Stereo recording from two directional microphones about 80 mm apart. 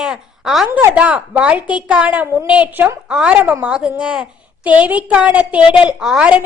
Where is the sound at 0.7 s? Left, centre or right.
Centre.